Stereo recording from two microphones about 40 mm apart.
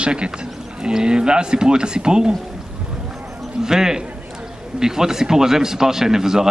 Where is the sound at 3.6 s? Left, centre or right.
Centre.